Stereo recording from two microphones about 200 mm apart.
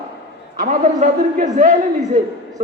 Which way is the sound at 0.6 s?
40° right (ahead or behind).